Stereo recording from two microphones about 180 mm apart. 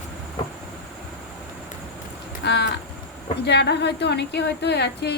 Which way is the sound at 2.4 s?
70° left (ahead or behind).